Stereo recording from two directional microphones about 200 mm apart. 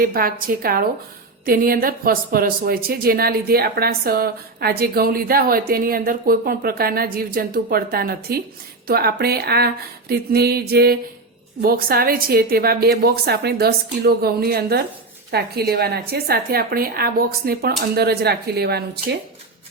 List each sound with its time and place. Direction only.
0.0 s speech: 45° right (ahead or behind)